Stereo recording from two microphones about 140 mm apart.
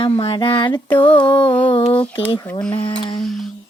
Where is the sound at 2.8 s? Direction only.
35° left (ahead or behind).